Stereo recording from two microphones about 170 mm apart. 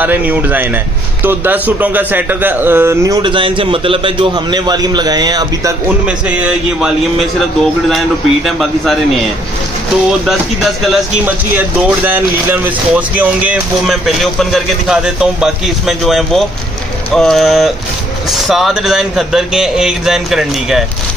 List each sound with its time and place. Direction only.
0.0 s a man's voice: 10° right (ahead or behind)
3.2 s a man's voice: 30° right (ahead or behind)
5.9 s a man's voice: 10° right (ahead or behind)
8.5 s speech: centre (ahead or behind)
10.2 s speech: centre (ahead or behind)